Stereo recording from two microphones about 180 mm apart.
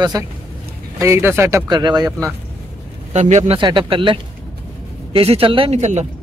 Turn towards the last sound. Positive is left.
turn(degrees=-40)  # may be behind; listen again after turning